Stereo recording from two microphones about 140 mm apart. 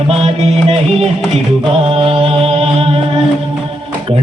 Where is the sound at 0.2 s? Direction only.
50° right (ahead or behind).